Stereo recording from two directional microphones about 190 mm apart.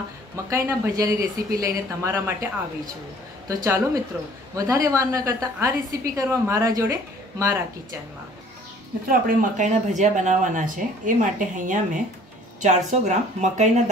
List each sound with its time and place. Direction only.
0.5 s a woman's voice: 15° right (ahead or behind)
3.4 s a woman's voice: 15° right (ahead or behind)
9.0 s speech: 40° right (ahead or behind)